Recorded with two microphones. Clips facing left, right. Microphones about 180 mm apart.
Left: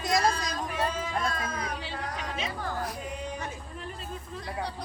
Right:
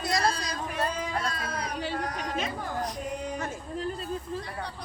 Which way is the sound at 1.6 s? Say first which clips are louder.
Right 4 dB; 45° right (ahead or behind).